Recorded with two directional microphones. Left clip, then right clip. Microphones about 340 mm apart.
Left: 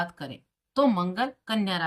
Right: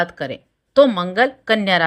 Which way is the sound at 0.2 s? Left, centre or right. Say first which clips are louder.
Right 13 dB; centre.